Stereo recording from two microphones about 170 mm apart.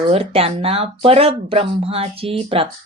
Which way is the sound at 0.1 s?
35° right (ahead or behind).